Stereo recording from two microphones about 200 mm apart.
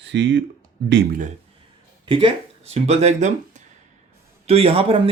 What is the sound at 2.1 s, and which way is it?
A man's voice, 25° right (ahead or behind).